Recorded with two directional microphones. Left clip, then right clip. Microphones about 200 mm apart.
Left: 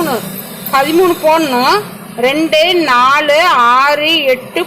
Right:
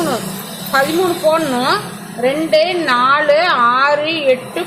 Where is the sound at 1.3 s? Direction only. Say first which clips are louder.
Left 5 dB; 30° left (ahead or behind).